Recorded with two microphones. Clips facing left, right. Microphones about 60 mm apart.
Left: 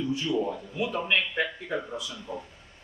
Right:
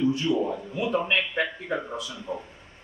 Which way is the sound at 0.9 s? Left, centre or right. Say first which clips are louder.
Right 3 dB; centre.